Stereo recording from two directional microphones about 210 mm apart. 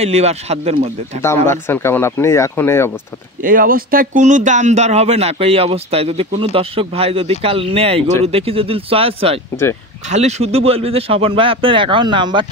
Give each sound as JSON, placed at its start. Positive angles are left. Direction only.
{"t": 0.0, "sound": "speech", "side_deg": -30}
{"t": 1.2, "sound": "speech", "side_deg": 10}
{"t": 3.4, "sound": "speech", "side_deg": -40}